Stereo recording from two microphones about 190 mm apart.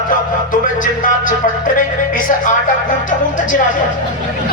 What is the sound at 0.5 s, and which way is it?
Speech, 45° left (ahead or behind).